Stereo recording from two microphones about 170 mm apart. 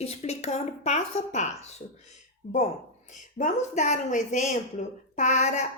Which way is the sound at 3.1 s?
45° left (ahead or behind).